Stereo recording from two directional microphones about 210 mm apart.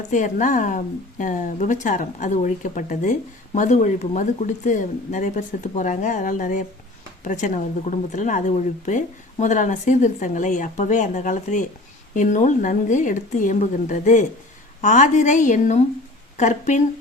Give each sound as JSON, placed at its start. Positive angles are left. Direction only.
{"t": 0.1, "sound": "speech", "side_deg": 35}